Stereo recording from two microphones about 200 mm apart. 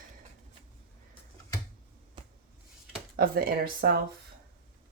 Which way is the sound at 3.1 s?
50° right (ahead or behind).